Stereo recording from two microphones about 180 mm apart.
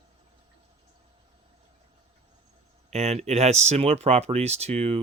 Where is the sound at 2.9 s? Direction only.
35° right (ahead or behind).